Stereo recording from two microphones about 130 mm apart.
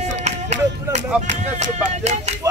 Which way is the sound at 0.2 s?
60° right (ahead or behind).